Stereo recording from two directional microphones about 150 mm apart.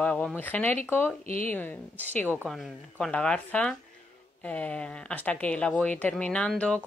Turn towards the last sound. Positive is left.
turn(degrees=5)  # may be behind; listen again after turning